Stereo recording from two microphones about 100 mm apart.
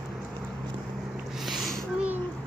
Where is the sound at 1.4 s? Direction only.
Centre (ahead or behind).